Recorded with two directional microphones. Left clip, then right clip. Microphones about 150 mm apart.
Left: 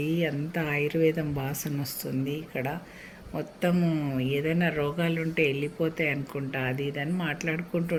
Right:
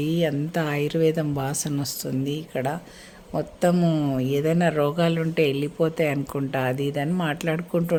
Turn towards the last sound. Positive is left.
turn(degrees=-30)  # may be behind; listen again after turning